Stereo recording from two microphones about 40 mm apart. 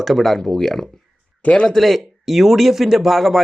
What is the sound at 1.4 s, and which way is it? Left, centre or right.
Speech, left.